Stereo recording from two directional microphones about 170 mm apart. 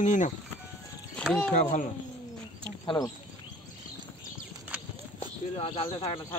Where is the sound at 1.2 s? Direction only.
5° left (ahead or behind).